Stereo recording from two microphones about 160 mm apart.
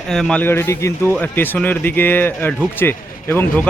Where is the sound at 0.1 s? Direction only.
5° left (ahead or behind).